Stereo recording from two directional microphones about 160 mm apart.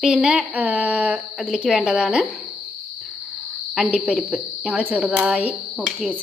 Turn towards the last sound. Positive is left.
turn(degrees=-5)  # may be behind; listen again after turning